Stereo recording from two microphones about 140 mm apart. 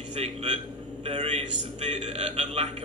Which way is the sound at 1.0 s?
50° right (ahead or behind).